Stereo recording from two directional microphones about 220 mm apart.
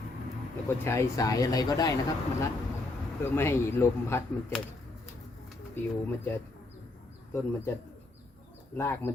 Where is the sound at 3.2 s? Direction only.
10° left (ahead or behind).